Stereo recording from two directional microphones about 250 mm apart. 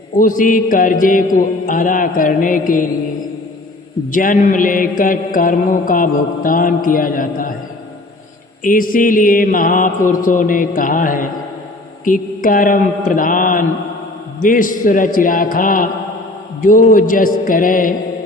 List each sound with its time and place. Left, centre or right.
0.2 s mantra: left
4.1 s mantra: left
8.6 s mantra: left